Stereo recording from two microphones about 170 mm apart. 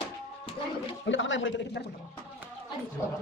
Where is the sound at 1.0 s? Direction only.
90° left.